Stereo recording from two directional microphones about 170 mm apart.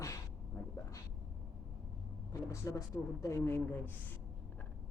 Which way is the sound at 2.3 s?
20° left (ahead or behind).